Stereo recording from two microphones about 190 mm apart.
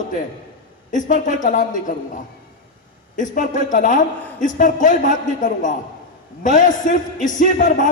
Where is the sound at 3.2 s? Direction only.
45° left (ahead or behind).